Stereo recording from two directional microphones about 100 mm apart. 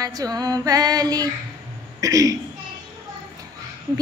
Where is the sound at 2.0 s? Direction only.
35° right (ahead or behind).